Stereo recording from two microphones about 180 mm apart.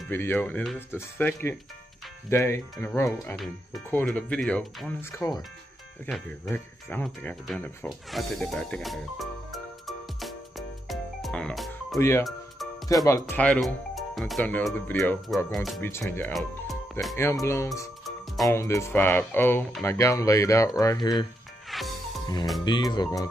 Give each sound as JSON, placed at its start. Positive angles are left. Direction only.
{"t": 0.1, "sound": "speech", "side_deg": 15}
{"t": 10.9, "sound": "music", "side_deg": 0}
{"t": 12.0, "sound": "speech", "side_deg": 15}
{"t": 15.8, "sound": "speech", "side_deg": 10}
{"t": 18.0, "sound": "music", "side_deg": 0}
{"t": 18.5, "sound": "speech", "side_deg": 15}
{"t": 21.6, "sound": "music", "side_deg": 0}
{"t": 22.7, "sound": "speech", "side_deg": 25}